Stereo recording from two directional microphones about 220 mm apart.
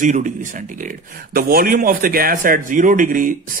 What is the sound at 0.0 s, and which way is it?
A man's voice, 35° right (ahead or behind).